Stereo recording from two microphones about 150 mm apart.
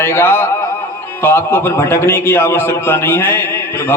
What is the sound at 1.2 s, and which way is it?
A man's voice, 15° left (ahead or behind).